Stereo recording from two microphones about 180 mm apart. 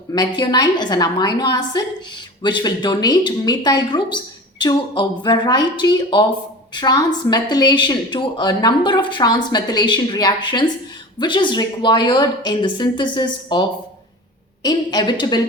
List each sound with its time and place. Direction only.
0.1 s a woman's voice: 25° left (ahead or behind)